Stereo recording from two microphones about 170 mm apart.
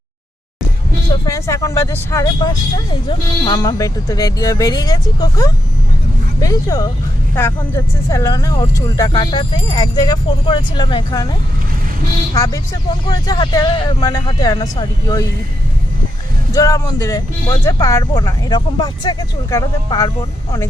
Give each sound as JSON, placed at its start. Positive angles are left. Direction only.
{"t": 1.3, "sound": "speech", "side_deg": 20}
{"t": 8.1, "sound": "speech", "side_deg": 20}
{"t": 16.5, "sound": "speech", "side_deg": 20}